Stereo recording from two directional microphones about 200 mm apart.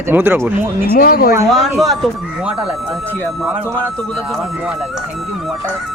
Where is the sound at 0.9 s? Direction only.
50° left (ahead or behind).